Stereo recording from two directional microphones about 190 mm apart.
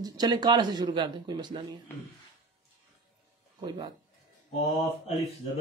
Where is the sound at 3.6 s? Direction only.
20° right (ahead or behind).